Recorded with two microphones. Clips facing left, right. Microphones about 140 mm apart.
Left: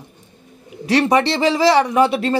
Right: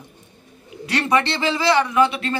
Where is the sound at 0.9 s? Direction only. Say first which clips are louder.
Left 5 dB; 35° left (ahead or behind).